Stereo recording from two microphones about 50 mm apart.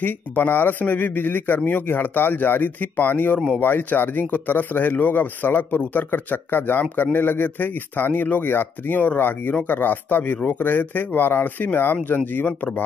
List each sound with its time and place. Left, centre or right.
0.0 s speech: left